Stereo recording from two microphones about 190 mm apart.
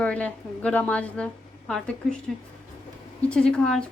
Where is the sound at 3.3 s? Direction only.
5° left (ahead or behind).